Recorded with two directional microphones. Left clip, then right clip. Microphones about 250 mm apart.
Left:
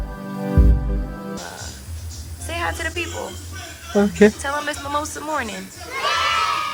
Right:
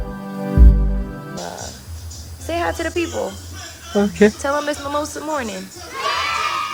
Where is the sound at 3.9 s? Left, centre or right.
Centre.